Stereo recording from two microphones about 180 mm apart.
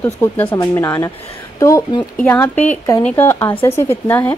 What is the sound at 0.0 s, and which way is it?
A woman's voice, 10° left (ahead or behind).